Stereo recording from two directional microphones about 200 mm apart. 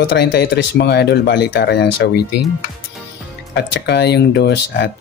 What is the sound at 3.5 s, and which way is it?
Speech, 55° left (ahead or behind).